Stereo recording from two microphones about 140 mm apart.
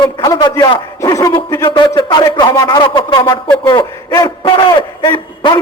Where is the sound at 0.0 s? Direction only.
35° left (ahead or behind).